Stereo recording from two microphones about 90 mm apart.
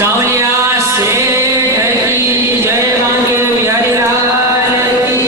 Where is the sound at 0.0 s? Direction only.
30° right (ahead or behind).